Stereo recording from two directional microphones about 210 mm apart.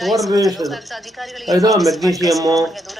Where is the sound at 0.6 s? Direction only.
15° right (ahead or behind).